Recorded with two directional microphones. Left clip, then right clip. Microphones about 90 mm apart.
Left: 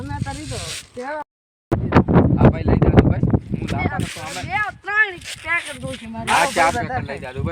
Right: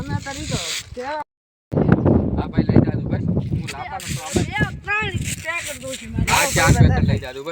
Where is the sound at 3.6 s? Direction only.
25° right (ahead or behind).